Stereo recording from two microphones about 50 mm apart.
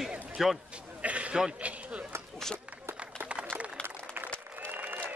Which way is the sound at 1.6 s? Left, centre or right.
Right.